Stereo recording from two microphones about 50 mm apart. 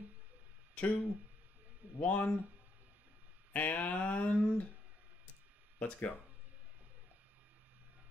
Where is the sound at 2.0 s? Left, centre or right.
Left.